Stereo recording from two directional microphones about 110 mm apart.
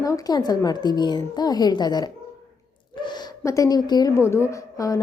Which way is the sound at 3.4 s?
30° left (ahead or behind).